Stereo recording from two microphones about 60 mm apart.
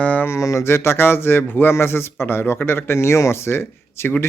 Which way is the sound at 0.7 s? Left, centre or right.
Left.